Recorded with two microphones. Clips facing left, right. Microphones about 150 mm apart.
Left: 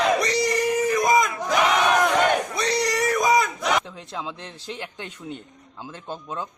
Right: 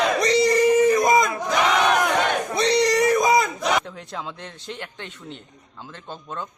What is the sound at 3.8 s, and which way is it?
A man's voice, centre (ahead or behind).